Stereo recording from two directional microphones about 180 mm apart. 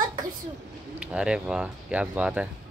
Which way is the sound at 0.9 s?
5° right (ahead or behind).